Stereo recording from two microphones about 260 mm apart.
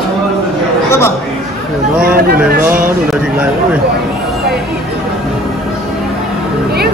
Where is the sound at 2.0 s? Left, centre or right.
Right.